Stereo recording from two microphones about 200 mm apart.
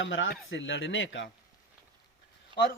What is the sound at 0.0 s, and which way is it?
Speech, 70° left (ahead or behind).